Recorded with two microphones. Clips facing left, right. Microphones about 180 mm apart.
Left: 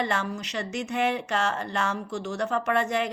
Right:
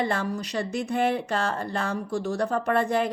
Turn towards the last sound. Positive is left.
turn(degrees=-30)  # may be behind; listen again after turning